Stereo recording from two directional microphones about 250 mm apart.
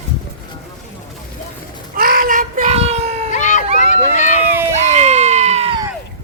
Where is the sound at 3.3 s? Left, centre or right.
Left.